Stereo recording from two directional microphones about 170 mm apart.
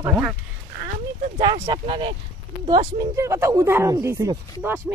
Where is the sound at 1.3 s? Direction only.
30° right (ahead or behind).